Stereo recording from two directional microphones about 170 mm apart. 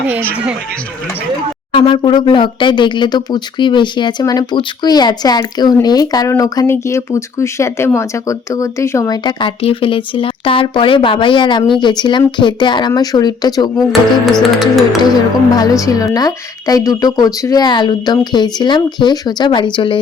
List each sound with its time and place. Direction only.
1.7 s speech: 30° left (ahead or behind)
14.3 s music: centre (ahead or behind)
15.1 s speech: 25° left (ahead or behind)